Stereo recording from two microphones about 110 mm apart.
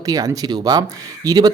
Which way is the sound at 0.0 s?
35° right (ahead or behind).